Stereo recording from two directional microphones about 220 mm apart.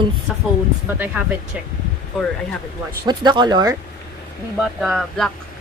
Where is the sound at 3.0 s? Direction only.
20° right (ahead or behind).